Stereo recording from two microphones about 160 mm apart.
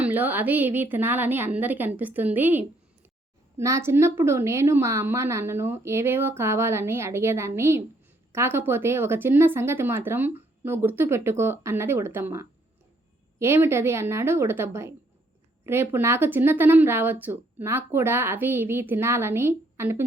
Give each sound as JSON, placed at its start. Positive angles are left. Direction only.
{"t": 0.0, "sound": "speech", "side_deg": -10}